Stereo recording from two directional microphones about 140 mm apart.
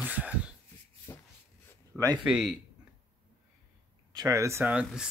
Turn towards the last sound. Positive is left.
turn(degrees=-10)  # may be behind; listen again after turning